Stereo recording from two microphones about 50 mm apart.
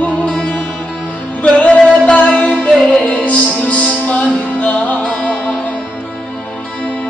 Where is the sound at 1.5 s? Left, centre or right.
Centre.